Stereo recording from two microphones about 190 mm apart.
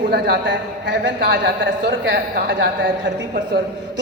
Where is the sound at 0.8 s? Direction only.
65° right (ahead or behind).